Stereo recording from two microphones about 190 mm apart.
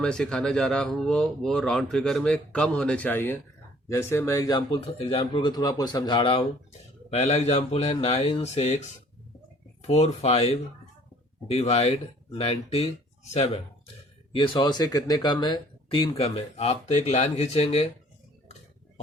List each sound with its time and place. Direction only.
0.0 s speech: 5° left (ahead or behind); by 17.8 s 35° left (ahead or behind)